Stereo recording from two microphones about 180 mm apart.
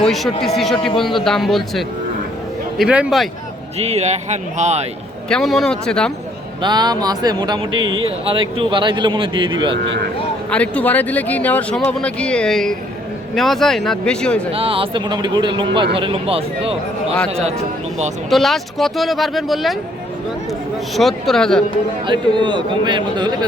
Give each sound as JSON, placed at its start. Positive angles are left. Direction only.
{"t": 0.0, "sound": "speech", "side_deg": 0}
{"t": 3.8, "sound": "speech", "side_deg": -35}
{"t": 5.3, "sound": "speech", "side_deg": 0}
{"t": 6.6, "sound": "speech", "side_deg": -25}
{"t": 7.8, "sound": "speech", "side_deg": -90}
{"t": 8.0, "sound": "speech", "side_deg": -30}
{"t": 9.8, "sound": "speech", "side_deg": -80}
{"t": 10.5, "sound": "speech", "side_deg": 5}
{"t": 14.5, "sound": "speech", "side_deg": -30}
{"t": 18.3, "sound": "speech", "side_deg": 0}
{"t": 22.0, "sound": "speech", "side_deg": -25}